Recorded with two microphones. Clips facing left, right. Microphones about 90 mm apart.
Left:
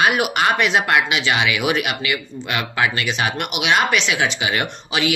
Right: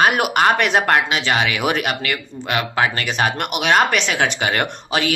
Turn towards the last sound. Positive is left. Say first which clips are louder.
# right 1 dB
turn(degrees=-45)  # may be behind; listen again after turning